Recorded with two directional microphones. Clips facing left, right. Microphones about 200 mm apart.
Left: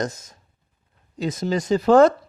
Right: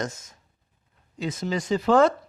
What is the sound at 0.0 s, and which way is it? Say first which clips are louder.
Speech: left 4 dB; 35° left (ahead or behind).